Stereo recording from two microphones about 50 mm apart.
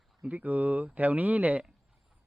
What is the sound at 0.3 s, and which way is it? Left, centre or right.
Speech, right.